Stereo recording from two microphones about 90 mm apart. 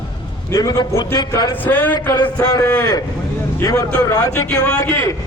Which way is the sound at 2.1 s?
50° left (ahead or behind).